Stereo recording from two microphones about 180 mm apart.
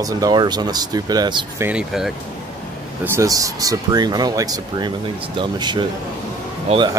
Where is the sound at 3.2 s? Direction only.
20° right (ahead or behind).